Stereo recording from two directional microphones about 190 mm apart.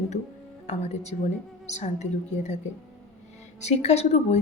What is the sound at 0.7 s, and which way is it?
A woman's voice, 35° left (ahead or behind).